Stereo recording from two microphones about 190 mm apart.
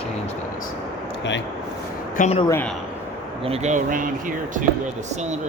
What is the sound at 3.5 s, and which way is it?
Speech, 40° right (ahead or behind).